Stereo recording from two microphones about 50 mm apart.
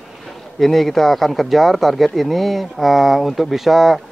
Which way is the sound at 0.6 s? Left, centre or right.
Centre.